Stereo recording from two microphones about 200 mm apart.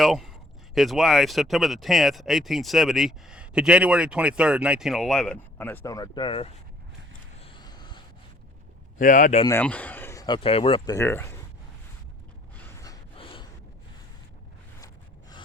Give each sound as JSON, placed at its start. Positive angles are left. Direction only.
{"t": 0.0, "sound": "speech", "side_deg": 0}
{"t": 7.4, "sound": "a sound", "side_deg": 20}
{"t": 9.0, "sound": "speech", "side_deg": 40}
{"t": 9.6, "sound": "speech", "side_deg": 5}
{"t": 10.9, "sound": "speech", "side_deg": 10}
{"t": 12.5, "sound": "gasp", "side_deg": 15}